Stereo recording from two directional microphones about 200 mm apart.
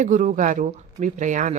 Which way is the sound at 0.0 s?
40° right (ahead or behind).